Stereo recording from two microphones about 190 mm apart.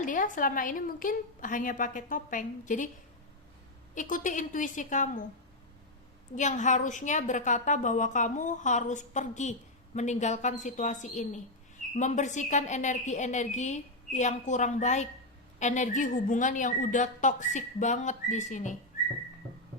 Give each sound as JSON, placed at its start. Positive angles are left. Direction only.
{"t": 0.0, "sound": "a woman's voice", "side_deg": 45}
{"t": 3.9, "sound": "a woman's voice", "side_deg": 45}
{"t": 6.3, "sound": "a woman's voice", "side_deg": 40}